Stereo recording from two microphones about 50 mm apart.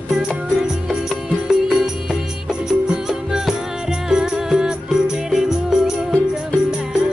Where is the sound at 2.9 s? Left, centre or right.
Centre.